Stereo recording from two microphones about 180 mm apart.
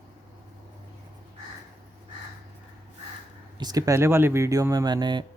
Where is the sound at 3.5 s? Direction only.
20° right (ahead or behind).